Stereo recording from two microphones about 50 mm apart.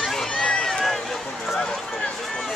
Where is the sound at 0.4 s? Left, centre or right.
Centre.